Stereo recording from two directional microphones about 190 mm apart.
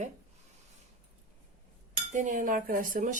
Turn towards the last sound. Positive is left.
turn(degrees=-45)  # may be behind; listen again after turning